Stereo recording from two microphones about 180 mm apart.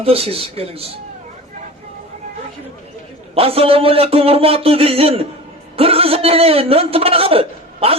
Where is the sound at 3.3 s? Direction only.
30° right (ahead or behind).